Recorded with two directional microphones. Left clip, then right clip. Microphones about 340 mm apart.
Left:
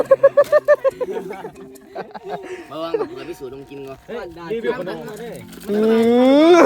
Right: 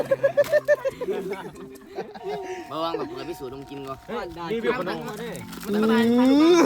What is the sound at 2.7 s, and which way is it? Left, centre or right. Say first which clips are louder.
Speech: left 5 dB; right.